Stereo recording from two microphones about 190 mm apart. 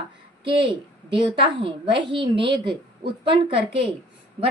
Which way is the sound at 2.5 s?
60° right (ahead or behind).